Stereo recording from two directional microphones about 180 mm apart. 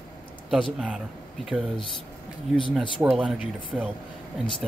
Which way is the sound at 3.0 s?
10° right (ahead or behind).